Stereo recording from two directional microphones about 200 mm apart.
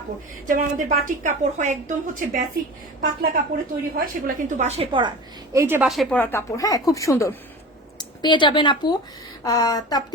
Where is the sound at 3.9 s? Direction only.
45° right (ahead or behind).